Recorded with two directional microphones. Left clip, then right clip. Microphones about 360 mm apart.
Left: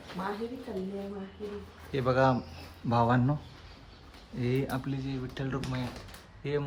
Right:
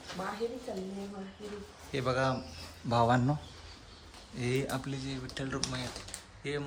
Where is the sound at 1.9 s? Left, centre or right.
Centre.